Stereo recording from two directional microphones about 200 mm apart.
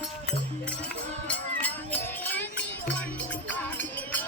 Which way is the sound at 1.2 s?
10° left (ahead or behind).